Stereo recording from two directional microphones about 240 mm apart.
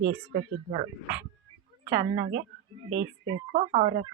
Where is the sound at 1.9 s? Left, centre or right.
Right.